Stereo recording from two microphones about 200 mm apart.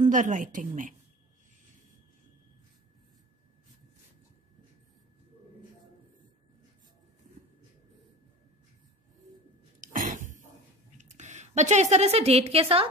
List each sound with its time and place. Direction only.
0.0 s a woman's voice: 40° right (ahead or behind)
9.8 s a sound: 40° right (ahead or behind)
11.0 s speech: 35° right (ahead or behind)